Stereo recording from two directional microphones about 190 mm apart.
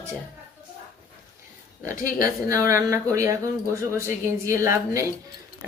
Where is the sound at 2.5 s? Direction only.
15° right (ahead or behind).